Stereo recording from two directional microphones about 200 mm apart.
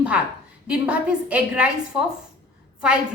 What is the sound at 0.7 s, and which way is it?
A woman's voice, 5° right (ahead or behind).